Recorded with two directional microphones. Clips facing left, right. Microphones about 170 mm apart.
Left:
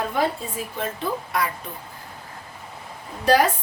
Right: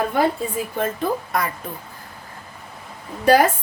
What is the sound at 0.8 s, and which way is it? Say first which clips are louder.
Speech: right 4 dB; 45° right (ahead or behind).